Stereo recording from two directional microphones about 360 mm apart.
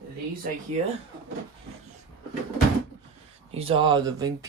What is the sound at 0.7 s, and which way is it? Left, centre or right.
Speech, centre.